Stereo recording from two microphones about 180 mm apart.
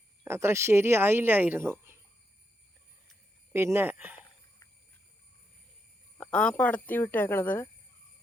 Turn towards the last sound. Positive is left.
turn(degrees=10)  # may be behind; listen again after turning